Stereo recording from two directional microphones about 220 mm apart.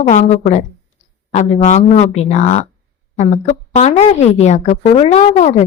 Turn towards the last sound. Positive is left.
turn(degrees=30)  # may be behind; listen again after turning